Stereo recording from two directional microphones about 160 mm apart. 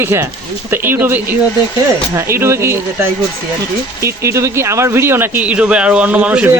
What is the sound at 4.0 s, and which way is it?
Speech, 15° right (ahead or behind).